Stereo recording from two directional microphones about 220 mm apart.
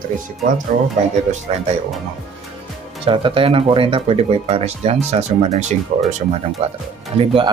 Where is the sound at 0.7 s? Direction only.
35° right (ahead or behind).